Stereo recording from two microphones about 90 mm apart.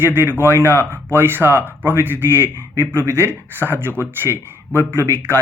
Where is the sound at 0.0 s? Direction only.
20° right (ahead or behind).